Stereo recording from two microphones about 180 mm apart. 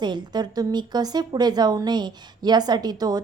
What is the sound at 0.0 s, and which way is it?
A woman's voice, 25° right (ahead or behind).